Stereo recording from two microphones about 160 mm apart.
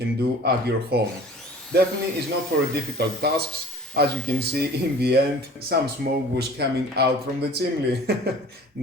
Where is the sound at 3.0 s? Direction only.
90° right.